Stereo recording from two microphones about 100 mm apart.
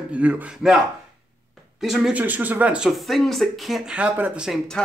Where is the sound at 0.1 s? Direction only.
15° right (ahead or behind).